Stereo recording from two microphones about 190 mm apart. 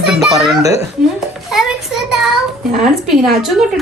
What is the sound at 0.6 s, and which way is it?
Speech, 15° right (ahead or behind).